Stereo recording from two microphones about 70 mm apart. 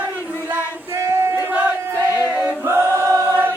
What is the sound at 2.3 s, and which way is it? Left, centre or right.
Choir, right.